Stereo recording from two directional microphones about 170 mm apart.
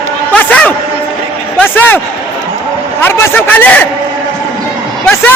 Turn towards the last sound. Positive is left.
turn(degrees=10)  # may be behind; listen again after turning